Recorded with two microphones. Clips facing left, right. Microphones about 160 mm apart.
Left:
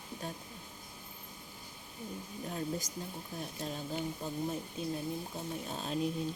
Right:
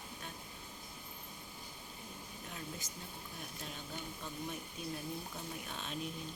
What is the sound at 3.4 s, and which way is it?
Speech, 35° left (ahead or behind).